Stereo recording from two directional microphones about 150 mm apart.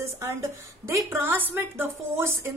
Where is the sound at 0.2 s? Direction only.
20° right (ahead or behind).